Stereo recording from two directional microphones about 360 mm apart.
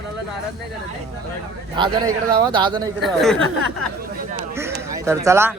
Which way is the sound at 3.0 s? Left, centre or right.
Centre.